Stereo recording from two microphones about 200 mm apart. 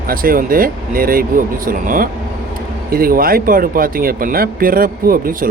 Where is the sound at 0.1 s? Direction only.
45° right (ahead or behind).